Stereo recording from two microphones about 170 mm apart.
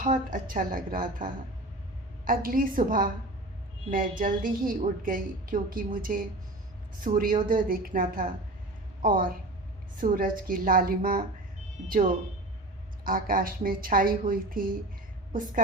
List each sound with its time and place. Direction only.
0.0 s a woman's voice: 50° right (ahead or behind)
13.1 s a woman's voice: 55° right (ahead or behind)